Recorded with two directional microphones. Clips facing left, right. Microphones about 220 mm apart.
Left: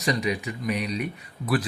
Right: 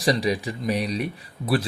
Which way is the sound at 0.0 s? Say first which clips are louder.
Right 4 dB; 30° right (ahead or behind).